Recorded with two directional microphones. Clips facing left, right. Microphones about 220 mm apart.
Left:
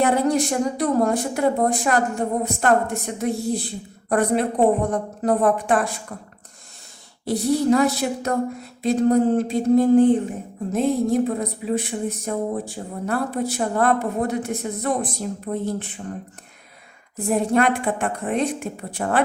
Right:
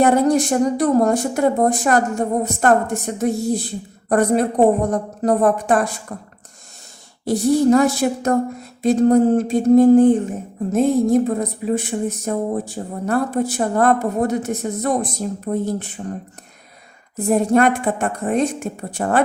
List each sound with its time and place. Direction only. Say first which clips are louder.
0.0 s speech: right 4 dB; 45° right (ahead or behind)
7.3 s speech: right 4 dB; 45° right (ahead or behind)
17.2 s speech: right 4 dB; 45° right (ahead or behind)